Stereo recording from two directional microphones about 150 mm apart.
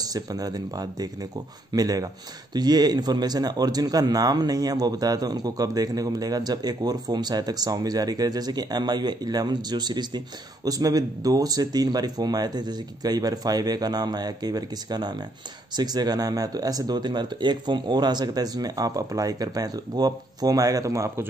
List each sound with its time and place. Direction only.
0.0 s speech: 25° right (ahead or behind)